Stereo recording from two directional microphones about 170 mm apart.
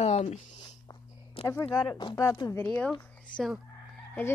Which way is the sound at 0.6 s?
25° left (ahead or behind).